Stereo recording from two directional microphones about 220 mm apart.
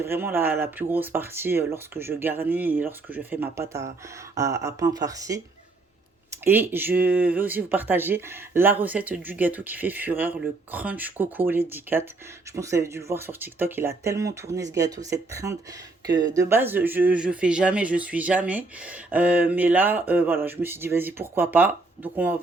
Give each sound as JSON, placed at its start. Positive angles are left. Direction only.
{"t": 0.0, "sound": "speech", "side_deg": -10}
{"t": 6.4, "sound": "speech", "side_deg": -10}